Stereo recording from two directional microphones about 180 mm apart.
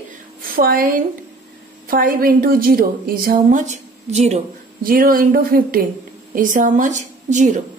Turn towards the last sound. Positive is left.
turn(degrees=-45)  # may be behind; listen again after turning